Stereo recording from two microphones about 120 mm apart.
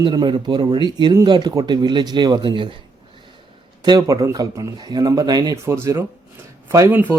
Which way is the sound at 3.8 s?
35° right (ahead or behind).